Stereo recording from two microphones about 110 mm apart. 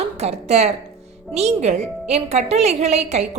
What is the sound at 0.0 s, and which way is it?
A woman's voice, 75° right (ahead or behind).